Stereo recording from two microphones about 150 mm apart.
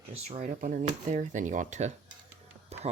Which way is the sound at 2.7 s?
45° right (ahead or behind).